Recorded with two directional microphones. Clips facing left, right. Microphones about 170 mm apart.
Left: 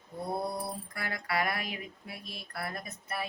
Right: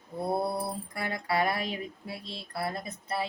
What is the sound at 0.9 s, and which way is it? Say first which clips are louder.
Mantra: right 4 dB; 25° right (ahead or behind).